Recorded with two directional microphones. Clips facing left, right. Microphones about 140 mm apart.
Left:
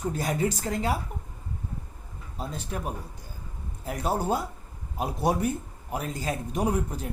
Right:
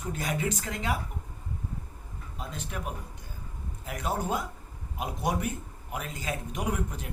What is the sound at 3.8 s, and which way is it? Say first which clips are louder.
Speech: left 4 dB; 35° left (ahead or behind).